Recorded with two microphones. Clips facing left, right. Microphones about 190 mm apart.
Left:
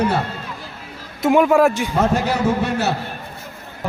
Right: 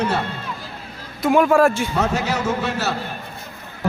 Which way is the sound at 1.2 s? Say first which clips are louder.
Left 1 dB; 15° left (ahead or behind).